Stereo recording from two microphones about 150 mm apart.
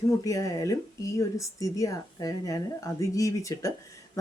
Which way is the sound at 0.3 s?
20° left (ahead or behind).